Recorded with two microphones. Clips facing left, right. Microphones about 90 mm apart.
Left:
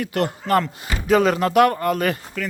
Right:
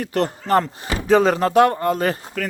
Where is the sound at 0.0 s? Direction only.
35° right (ahead or behind).